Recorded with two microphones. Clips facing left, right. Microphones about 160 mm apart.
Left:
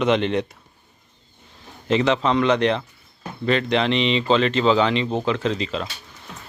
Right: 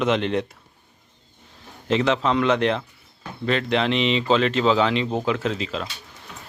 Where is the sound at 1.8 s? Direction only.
Centre (ahead or behind).